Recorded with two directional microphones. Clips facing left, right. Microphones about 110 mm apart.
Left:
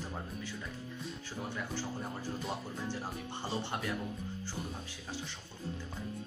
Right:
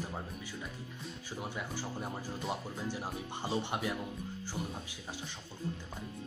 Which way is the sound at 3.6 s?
15° right (ahead or behind).